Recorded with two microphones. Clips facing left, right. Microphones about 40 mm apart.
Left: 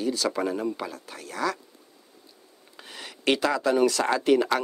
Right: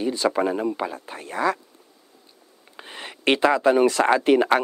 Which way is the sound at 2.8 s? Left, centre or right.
Right.